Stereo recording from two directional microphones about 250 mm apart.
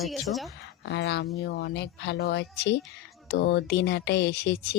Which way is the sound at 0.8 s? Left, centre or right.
Left.